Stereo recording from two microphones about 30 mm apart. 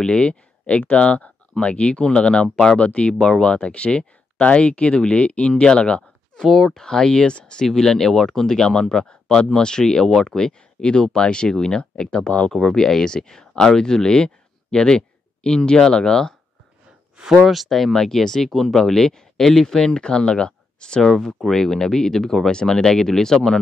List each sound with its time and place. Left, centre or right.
0.0 s speech: left
6.4 s speech: centre
6.7 s speech: centre
7.1 s speech: left
7.6 s speech: centre
12.1 s speech: left
12.5 s speech: centre
17.5 s speech: centre; by 21.0 s left
21.0 s speech: centre